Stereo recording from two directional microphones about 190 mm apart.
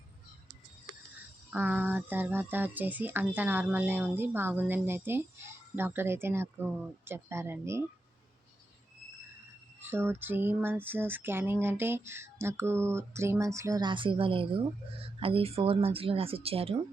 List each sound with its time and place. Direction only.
1.5 s speech: 10° right (ahead or behind)
9.8 s speech: 10° right (ahead or behind); by 16.7 s 30° right (ahead or behind)